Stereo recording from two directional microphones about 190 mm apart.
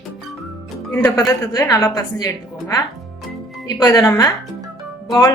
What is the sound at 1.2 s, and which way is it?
Speech, 20° left (ahead or behind).